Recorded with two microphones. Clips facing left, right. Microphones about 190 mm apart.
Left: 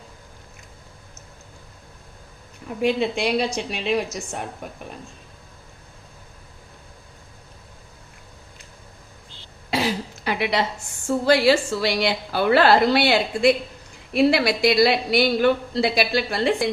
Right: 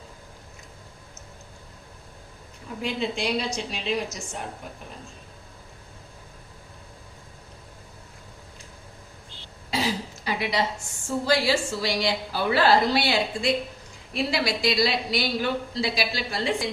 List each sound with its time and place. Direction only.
2.8 s a woman's voice: 60° left (ahead or behind)
9.6 s throat clearing: 65° left (ahead or behind)
11.3 s a woman's voice: 60° left (ahead or behind)